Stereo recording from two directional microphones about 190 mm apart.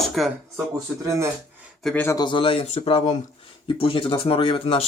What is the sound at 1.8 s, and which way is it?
Speech, centre (ahead or behind).